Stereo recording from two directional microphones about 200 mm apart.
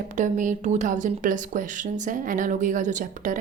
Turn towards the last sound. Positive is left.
turn(degrees=-40)  # may be behind; listen again after turning